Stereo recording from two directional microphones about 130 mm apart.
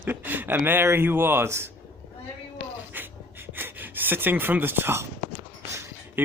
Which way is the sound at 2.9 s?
15° right (ahead or behind).